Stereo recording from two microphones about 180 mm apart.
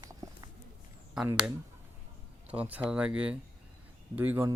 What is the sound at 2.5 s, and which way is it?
Speech, 10° right (ahead or behind).